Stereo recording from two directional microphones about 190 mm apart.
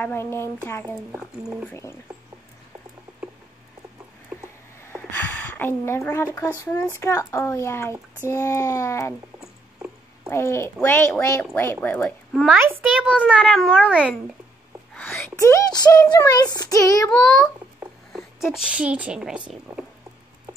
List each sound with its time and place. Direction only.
0.0 s speech: 15° left (ahead or behind)
4.9 s a sound: 10° left (ahead or behind)
6.3 s speech: 15° left (ahead or behind)
9.4 s a sound: 5° right (ahead or behind)
10.3 s speech: 15° left (ahead or behind)
12.4 s a child's voice: 5° right (ahead or behind)
15.0 s speech: 10° left (ahead or behind)
18.7 s a child's voice: 5° right (ahead or behind)